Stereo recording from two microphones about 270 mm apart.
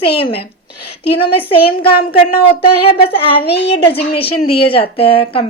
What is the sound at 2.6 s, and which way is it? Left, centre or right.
Speech, left.